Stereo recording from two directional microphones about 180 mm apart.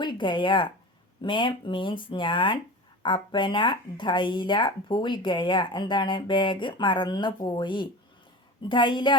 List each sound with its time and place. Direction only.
0.0 s speech: 25° left (ahead or behind)